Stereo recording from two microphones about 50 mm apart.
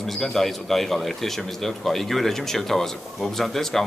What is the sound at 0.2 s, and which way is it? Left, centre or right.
A man's voice, centre.